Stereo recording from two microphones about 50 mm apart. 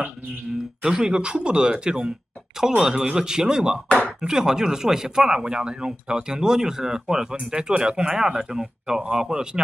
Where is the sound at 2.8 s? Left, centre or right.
Centre.